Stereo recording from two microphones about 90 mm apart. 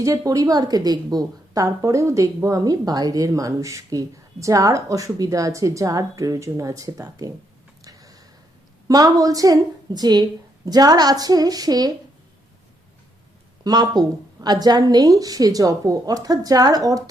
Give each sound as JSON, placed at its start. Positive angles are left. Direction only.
{"t": 0.0, "sound": "a woman's voice", "side_deg": -40}
{"t": 7.9, "sound": "a sound", "side_deg": -45}
{"t": 8.9, "sound": "a woman's voice", "side_deg": -45}
{"t": 13.7, "sound": "a woman's voice", "side_deg": -50}